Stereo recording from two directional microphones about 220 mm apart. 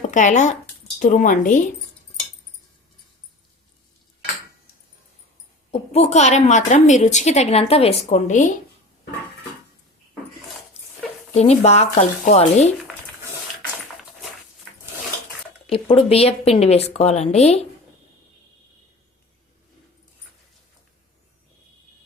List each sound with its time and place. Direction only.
0.1 s a woman's voice: 35° left (ahead or behind)
5.7 s a woman's voice: 30° left (ahead or behind)
11.3 s a woman's voice: 30° left (ahead or behind)
15.7 s a woman's voice: 25° left (ahead or behind)